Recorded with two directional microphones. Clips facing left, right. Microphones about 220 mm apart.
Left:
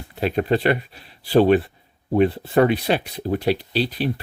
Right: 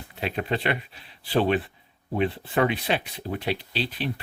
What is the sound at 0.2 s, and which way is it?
Speech, 40° left (ahead or behind).